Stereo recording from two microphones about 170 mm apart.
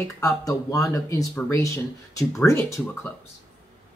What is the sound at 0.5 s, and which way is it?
Speech, 20° left (ahead or behind).